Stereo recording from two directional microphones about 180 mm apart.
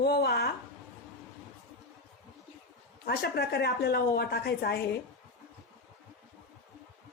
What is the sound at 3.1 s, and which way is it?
A woman's voice, 60° left (ahead or behind).